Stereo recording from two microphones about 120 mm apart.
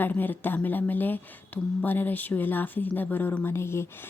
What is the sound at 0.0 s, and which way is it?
Speech, 15° left (ahead or behind).